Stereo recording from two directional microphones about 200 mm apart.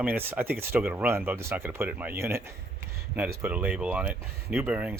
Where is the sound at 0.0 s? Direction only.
10° right (ahead or behind).